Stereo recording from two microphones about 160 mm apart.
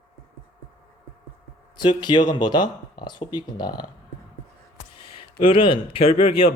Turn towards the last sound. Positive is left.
turn(degrees=35)  # may be behind; listen again after turning